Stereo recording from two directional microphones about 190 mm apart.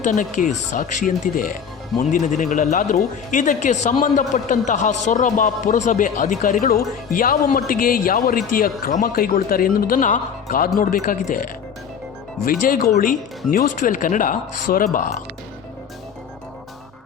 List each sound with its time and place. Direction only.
0.0 s speech: 40° left (ahead or behind)